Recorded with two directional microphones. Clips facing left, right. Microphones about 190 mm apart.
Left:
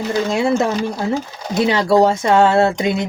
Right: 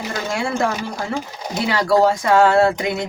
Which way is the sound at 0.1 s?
20° left (ahead or behind).